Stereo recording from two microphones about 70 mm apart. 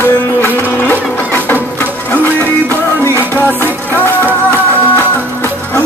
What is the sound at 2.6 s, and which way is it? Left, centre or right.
Music, left.